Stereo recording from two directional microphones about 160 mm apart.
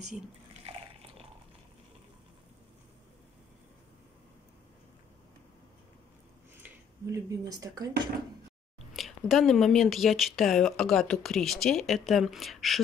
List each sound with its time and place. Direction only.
0.7 s water: 35° right (ahead or behind)
6.6 s speech: 20° right (ahead or behind)
8.9 s speech: centre (ahead or behind)